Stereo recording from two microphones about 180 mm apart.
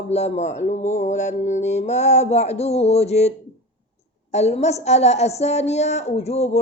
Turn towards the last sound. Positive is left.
turn(degrees=35)  # may be behind; listen again after turning